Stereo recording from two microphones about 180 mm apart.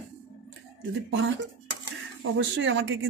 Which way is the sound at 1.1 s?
80° right.